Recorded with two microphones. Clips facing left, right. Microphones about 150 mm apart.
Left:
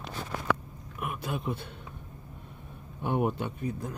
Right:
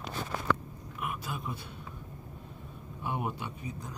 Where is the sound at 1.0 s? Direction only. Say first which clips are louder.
Left 3 dB; 55° left (ahead or behind).